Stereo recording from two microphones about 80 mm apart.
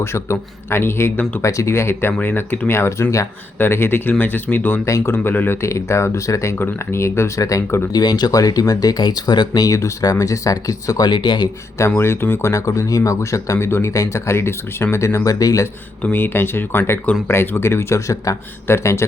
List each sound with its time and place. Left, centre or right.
0.0 s speech: left
4.9 s speech: left
5.1 s speech: left
5.6 s speech: left
8.0 s speech: left
9.6 s speech: left
11.1 s speech: left
11.9 s speech: left
16.1 s speech: left